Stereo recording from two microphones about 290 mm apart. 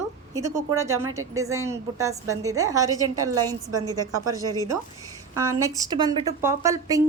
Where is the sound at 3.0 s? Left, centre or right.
Right.